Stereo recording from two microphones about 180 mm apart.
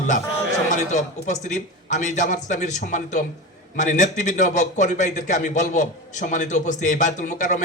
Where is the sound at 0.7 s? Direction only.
45° left (ahead or behind).